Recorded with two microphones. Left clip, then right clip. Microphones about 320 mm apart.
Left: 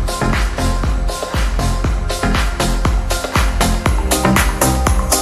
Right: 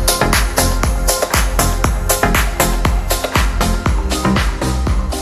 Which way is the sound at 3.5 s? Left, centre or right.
Centre.